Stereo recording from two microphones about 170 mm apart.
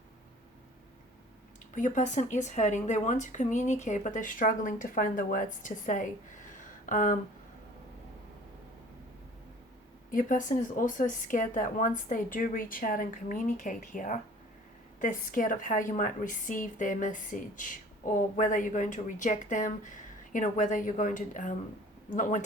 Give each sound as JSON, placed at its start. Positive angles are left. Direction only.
{"t": 1.7, "sound": "speech", "side_deg": 45}
{"t": 10.1, "sound": "speech", "side_deg": 50}